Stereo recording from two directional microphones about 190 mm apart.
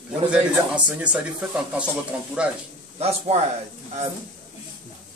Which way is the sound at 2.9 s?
30° right (ahead or behind).